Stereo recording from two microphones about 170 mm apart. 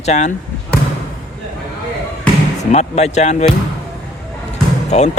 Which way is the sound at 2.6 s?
40° left (ahead or behind).